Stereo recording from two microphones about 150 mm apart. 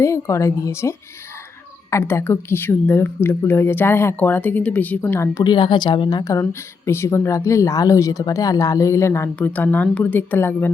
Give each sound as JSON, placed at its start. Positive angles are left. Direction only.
{"t": 0.0, "sound": "a woman's voice", "side_deg": 20}
{"t": 5.4, "sound": "speech", "side_deg": 30}